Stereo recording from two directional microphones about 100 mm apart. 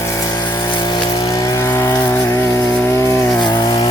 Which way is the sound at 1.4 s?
35° left (ahead or behind).